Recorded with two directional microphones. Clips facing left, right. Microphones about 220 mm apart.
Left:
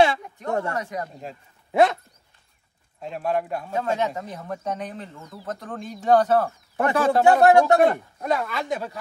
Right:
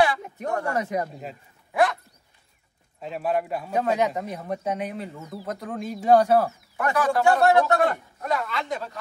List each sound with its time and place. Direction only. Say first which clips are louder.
0.5 s a man's voice: left 2 dB; 25° left (ahead or behind)
0.7 s speech: right 4 dB; 20° right (ahead or behind)
1.7 s speech: left 4 dB; 25° left (ahead or behind)
3.0 s speech: even; centre (ahead or behind)
6.8 s a man's voice: left 3 dB; 25° left (ahead or behind); by 8.9 s 10° left (ahead or behind)